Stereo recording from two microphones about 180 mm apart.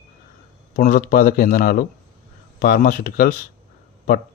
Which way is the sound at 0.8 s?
50° left (ahead or behind).